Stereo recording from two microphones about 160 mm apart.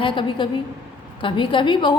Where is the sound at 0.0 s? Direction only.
30° left (ahead or behind).